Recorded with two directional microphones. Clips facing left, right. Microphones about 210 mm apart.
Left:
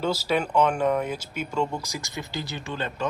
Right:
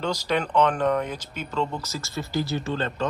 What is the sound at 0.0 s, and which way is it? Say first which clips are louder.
Speech: left 1 dB; 5° left (ahead or behind).